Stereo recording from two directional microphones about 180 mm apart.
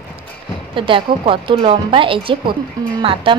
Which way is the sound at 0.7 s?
30° right (ahead or behind).